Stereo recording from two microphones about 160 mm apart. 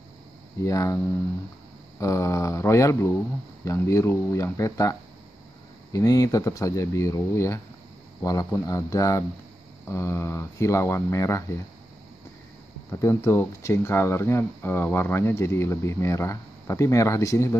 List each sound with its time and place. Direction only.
0.7 s speech: 20° left (ahead or behind)
5.9 s speech: 20° left (ahead or behind)
13.0 s speech: 15° left (ahead or behind)